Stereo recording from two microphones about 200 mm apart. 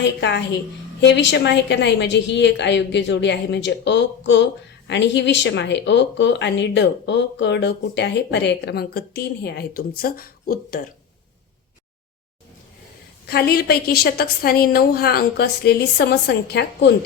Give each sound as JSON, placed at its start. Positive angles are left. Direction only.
{"t": 0.0, "sound": "speech", "side_deg": 60}
{"t": 13.2, "sound": "a woman's voice", "side_deg": 50}